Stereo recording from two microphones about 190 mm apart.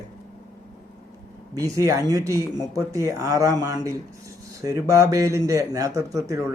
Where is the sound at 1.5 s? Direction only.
15° right (ahead or behind).